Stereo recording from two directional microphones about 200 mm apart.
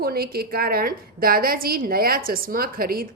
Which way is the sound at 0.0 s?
50° right (ahead or behind).